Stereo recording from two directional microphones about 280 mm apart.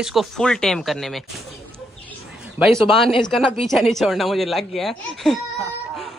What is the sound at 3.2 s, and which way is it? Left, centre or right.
A woman's voice, centre.